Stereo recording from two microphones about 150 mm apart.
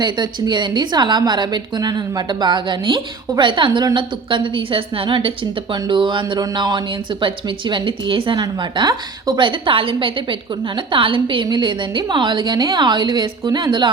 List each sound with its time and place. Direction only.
0.0 s a woman's voice: 30° right (ahead or behind)